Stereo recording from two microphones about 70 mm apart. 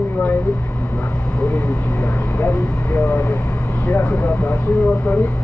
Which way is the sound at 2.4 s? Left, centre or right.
Left.